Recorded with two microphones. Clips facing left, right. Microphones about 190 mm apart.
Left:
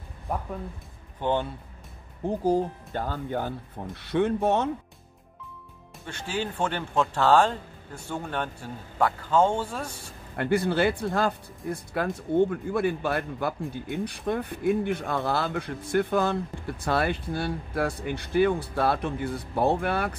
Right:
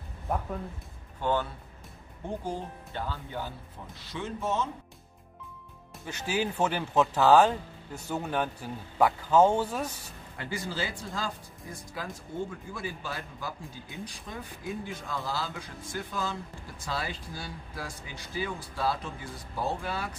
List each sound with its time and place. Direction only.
1.2 s speech: 20° left (ahead or behind)
2.2 s speech: 40° left (ahead or behind); by 4.6 s 60° left (ahead or behind)
6.0 s speech: 5° right (ahead or behind)
10.3 s speech: 60° left (ahead or behind)